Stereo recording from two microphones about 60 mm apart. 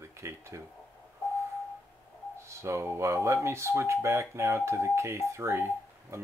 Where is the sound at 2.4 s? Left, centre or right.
Right.